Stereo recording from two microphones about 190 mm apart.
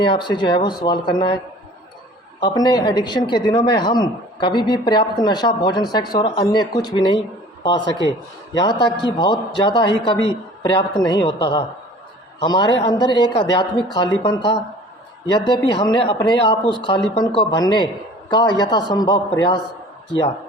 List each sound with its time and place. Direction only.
0.0 s speech: 25° left (ahead or behind)
2.4 s speech: 20° left (ahead or behind)